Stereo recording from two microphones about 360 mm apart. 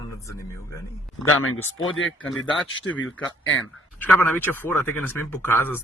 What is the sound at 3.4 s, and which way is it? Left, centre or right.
Speech, left.